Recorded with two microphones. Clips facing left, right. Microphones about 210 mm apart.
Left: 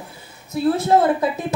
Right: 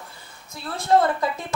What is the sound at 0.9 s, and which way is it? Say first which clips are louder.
Speech: right 2 dB; 5° left (ahead or behind).